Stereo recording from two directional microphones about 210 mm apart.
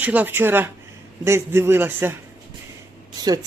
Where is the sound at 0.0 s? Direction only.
5° right (ahead or behind).